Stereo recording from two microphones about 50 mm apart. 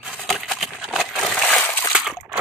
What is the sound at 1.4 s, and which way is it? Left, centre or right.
Splash, left.